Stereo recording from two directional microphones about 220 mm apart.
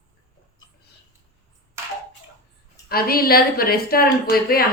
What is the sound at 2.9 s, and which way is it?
A woman's voice, 45° left (ahead or behind).